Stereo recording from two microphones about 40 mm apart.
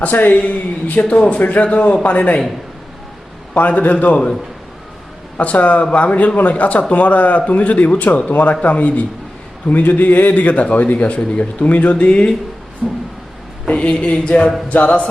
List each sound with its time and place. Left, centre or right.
0.0 s a man's voice: left
3.5 s a man's voice: left
5.4 s a man's voice: left
12.8 s a sound: centre
13.7 s a woman's voice: left